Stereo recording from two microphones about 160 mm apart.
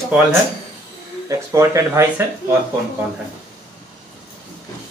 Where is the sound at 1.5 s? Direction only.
20° right (ahead or behind).